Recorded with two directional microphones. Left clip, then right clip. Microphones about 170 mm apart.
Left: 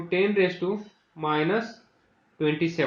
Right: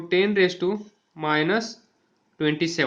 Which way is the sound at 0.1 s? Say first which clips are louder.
Right 3 dB; 60° right (ahead or behind).